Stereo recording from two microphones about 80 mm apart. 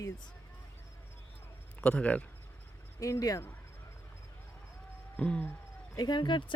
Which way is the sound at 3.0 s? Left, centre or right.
Left.